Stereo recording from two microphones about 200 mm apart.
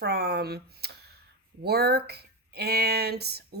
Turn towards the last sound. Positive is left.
turn(degrees=-55)  # may be behind; listen again after turning